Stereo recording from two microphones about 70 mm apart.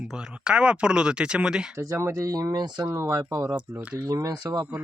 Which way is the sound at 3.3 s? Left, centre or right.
Right.